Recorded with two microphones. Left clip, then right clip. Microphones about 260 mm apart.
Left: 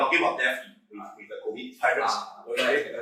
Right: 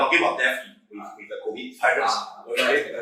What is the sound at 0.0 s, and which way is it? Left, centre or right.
Speech, centre.